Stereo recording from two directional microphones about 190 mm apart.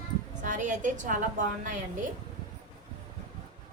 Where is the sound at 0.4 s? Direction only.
40° right (ahead or behind).